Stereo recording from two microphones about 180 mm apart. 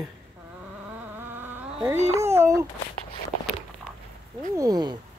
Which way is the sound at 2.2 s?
15° right (ahead or behind).